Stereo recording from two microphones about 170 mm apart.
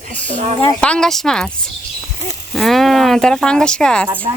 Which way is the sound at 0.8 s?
5° left (ahead or behind).